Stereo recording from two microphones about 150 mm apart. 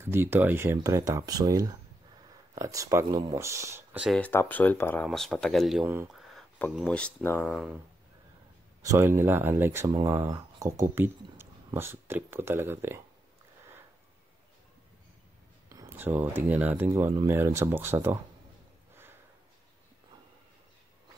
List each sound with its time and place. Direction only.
0.0 s speech: 15° right (ahead or behind)
4.2 s speech: 15° left (ahead or behind)
7.5 s speech: 5° right (ahead or behind)
8.8 s speech: 15° right (ahead or behind)
15.7 s speech: 20° right (ahead or behind)